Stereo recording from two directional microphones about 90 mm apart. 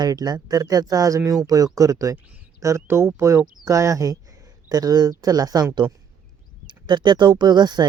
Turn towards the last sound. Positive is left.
turn(degrees=-50)  # may be behind; listen again after turning